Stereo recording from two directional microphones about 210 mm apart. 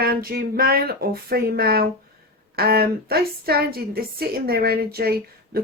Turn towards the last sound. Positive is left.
turn(degrees=-45)  # may be behind; listen again after turning